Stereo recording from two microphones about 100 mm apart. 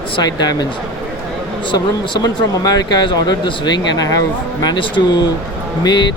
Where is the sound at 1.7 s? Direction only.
50° left (ahead or behind).